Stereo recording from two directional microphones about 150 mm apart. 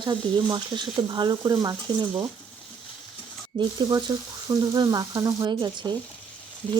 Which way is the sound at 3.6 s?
30° right (ahead or behind).